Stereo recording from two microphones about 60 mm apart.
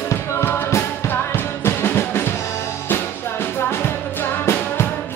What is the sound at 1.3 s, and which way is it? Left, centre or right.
Music, left.